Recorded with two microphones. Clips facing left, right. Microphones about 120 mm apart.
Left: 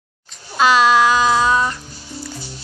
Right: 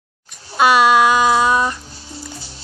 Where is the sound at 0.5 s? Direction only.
20° right (ahead or behind).